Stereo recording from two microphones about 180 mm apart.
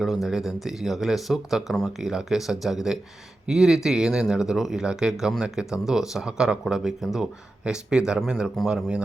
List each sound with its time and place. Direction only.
0.0 s speech: centre (ahead or behind)